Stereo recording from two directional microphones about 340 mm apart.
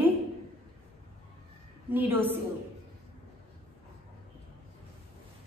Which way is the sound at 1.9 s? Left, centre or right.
Centre.